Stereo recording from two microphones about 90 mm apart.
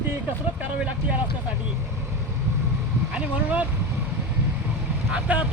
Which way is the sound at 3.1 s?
15° right (ahead or behind).